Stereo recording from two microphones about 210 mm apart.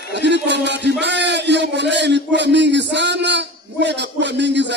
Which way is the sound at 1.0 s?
55° right (ahead or behind).